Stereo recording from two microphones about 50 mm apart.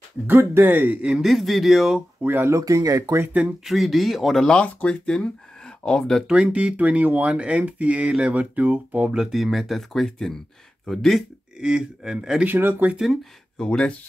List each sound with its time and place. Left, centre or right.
0.3 s speech: right
1.1 s speech: centre
2.2 s speech: right
2.5 s speech: right
3.6 s speech: centre
4.8 s speech: left
6.3 s speech: right
9.1 s speech: centre
11.6 s speech: centre
12.4 s speech: right
13.6 s speech: left